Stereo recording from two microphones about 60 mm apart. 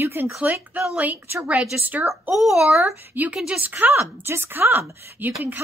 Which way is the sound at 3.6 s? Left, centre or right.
Right.